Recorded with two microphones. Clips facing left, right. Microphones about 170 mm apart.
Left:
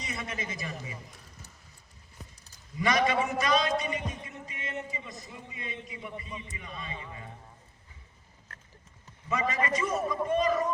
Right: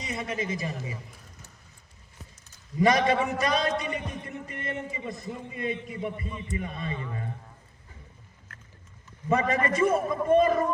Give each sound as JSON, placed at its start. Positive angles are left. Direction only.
{"t": 0.1, "sound": "a man's voice", "side_deg": -30}
{"t": 2.7, "sound": "a man's voice", "side_deg": -40}
{"t": 9.3, "sound": "a man's voice", "side_deg": -50}